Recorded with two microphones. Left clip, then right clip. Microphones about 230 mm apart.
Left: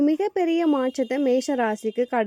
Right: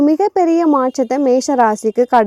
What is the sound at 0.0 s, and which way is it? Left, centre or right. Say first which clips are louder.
Speech: right 9 dB; right.